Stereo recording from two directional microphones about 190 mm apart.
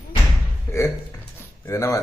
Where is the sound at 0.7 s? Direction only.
15° left (ahead or behind).